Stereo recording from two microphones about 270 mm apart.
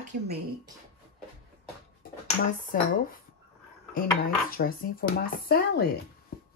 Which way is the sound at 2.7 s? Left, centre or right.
Left.